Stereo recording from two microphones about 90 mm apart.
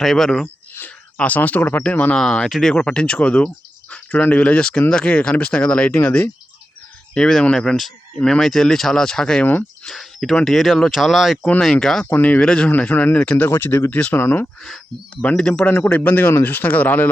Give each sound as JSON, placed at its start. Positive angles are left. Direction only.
{"t": 0.0, "sound": "speech", "side_deg": 5}
{"t": 0.4, "sound": "speech", "side_deg": 25}
{"t": 7.1, "sound": "speech", "side_deg": 5}
{"t": 12.0, "sound": "speech", "side_deg": 20}
{"t": 14.6, "sound": "speech", "side_deg": 5}